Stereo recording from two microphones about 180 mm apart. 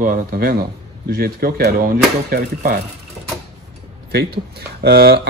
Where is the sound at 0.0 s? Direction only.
50° right (ahead or behind).